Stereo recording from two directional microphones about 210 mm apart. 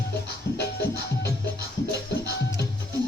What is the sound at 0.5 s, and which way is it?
Music, 50° left (ahead or behind).